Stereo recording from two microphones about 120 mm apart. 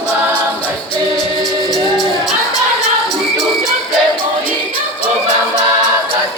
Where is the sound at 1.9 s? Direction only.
Centre (ahead or behind).